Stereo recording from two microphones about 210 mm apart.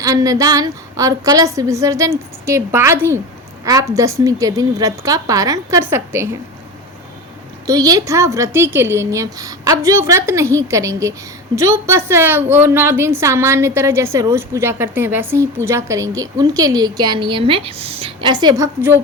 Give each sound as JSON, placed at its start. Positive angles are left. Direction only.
{"t": 0.0, "sound": "a woman's voice", "side_deg": -15}
{"t": 7.7, "sound": "a woman's voice", "side_deg": -15}